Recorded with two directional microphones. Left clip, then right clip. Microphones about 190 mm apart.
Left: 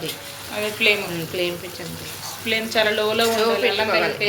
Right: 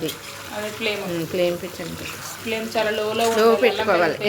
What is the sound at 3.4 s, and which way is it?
Speech, 50° right (ahead or behind).